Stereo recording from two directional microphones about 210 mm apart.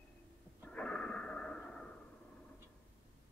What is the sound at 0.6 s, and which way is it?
Snort, 5° left (ahead or behind).